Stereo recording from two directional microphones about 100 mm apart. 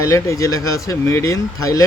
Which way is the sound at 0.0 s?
30° left (ahead or behind).